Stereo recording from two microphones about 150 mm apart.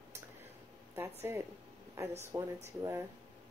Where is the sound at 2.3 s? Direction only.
20° right (ahead or behind).